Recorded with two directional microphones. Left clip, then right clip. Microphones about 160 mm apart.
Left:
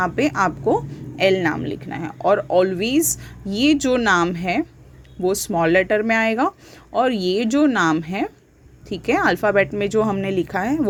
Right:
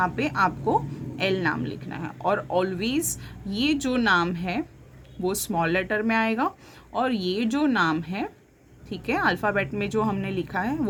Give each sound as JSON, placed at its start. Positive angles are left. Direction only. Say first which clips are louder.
{"t": 0.0, "sound": "speech", "louder": "left 4 dB", "side_deg": 30}
{"t": 5.2, "sound": "a woman's voice", "louder": "left 6 dB", "side_deg": 20}